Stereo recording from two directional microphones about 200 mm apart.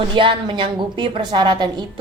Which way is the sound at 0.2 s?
25° right (ahead or behind).